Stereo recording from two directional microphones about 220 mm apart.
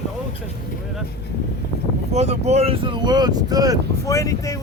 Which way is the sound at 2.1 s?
30° right (ahead or behind).